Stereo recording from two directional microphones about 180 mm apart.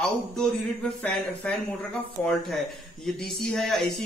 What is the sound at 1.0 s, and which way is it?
Speech, 5° left (ahead or behind).